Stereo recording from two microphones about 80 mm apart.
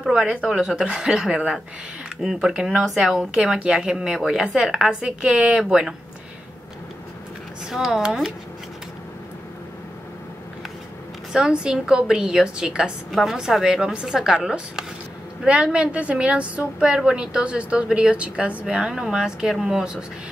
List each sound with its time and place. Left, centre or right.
0.1 s a woman's voice: centre
7.7 s speech: centre
11.3 s a woman's voice: centre